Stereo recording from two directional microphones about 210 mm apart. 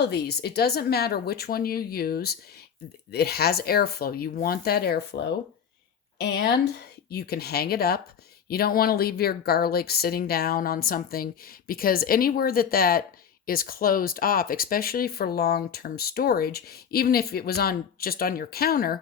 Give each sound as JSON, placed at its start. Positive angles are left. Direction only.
{"t": 0.0, "sound": "speech", "side_deg": 50}
{"t": 6.1, "sound": "speech", "side_deg": 50}